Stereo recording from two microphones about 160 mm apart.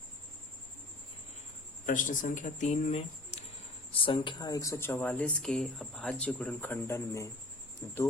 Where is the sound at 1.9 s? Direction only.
55° left (ahead or behind).